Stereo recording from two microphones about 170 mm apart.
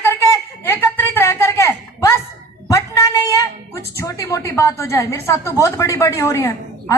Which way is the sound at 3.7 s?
20° left (ahead or behind).